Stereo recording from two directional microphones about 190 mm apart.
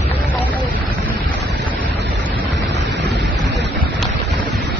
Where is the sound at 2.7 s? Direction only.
65° right (ahead or behind).